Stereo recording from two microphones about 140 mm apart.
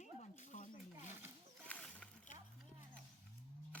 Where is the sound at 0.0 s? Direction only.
60° left (ahead or behind).